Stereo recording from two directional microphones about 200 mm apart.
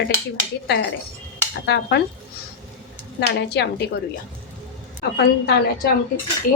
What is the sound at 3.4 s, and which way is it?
Dishes, 55° left (ahead or behind).